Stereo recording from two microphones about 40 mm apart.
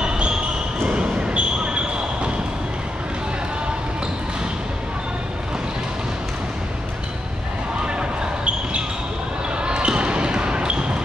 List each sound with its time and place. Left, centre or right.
0.0 s basketball bounce: right
7.8 s basketball bounce: right
9.6 s basketball bounce: right